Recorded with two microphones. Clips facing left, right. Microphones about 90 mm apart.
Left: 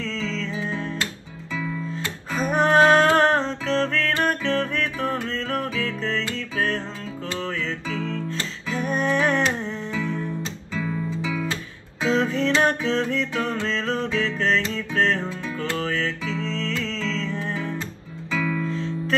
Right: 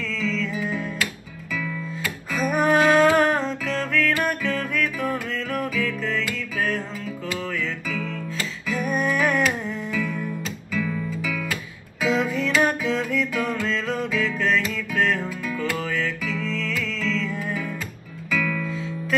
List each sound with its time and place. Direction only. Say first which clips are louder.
0.0 s music: right 2 dB; 30° left (ahead or behind)
18.7 s music: left 2 dB; 5° right (ahead or behind)